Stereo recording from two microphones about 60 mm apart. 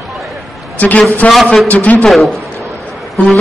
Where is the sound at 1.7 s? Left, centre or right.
Left.